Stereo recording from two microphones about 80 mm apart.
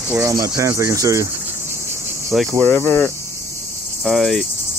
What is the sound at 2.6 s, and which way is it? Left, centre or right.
Speech, left.